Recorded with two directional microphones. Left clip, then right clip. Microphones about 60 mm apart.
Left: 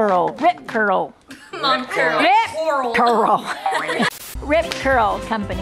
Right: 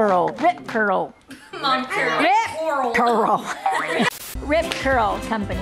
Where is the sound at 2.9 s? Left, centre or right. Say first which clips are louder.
Left 3 dB; left.